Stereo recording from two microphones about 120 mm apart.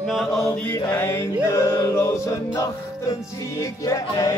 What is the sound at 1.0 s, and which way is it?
Music, 25° left (ahead or behind).